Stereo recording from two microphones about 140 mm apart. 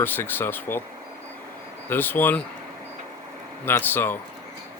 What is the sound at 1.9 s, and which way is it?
Speech, 15° left (ahead or behind).